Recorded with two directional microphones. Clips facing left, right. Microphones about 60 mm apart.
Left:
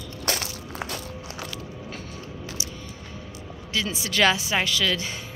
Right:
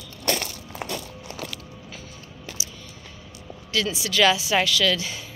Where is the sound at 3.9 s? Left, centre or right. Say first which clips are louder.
Right 1 dB; left.